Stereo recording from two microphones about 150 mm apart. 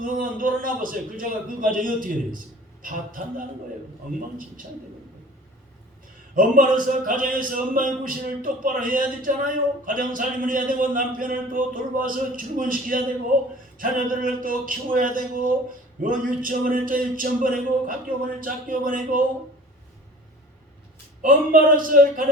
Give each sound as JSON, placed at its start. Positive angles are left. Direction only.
{"t": 0.0, "sound": "speech", "side_deg": -65}
{"t": 6.3, "sound": "speech", "side_deg": -65}
{"t": 21.2, "sound": "speech", "side_deg": -65}